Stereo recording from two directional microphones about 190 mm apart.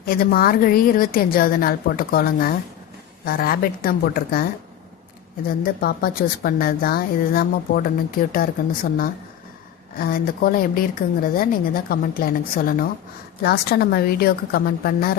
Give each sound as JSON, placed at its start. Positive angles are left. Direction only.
{"t": 0.0, "sound": "a woman's voice", "side_deg": 50}
{"t": 5.5, "sound": "a woman's voice", "side_deg": 50}